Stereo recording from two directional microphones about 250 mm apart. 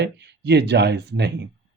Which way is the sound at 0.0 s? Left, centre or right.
Right.